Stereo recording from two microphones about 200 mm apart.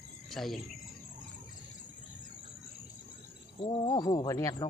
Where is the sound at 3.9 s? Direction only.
15° left (ahead or behind).